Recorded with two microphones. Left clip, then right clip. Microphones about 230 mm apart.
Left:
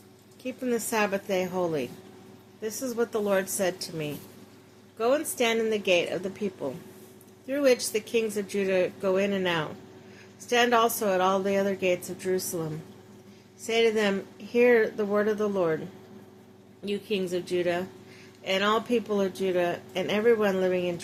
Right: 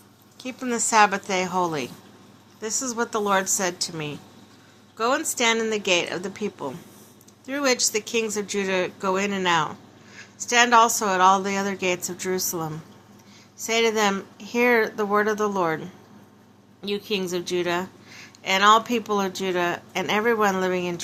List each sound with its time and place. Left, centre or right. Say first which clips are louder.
0.4 s a woman's voice: right 2 dB; centre
16.8 s a woman's voice: right 3 dB; centre